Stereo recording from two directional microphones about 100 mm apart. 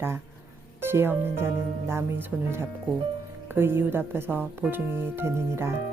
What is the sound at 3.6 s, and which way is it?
A woman's voice, 20° right (ahead or behind).